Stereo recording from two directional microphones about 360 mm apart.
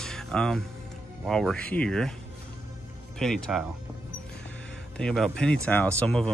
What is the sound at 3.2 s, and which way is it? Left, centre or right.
Speech, centre.